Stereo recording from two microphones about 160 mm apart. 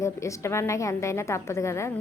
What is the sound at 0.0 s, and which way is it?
A woman's voice, 20° left (ahead or behind).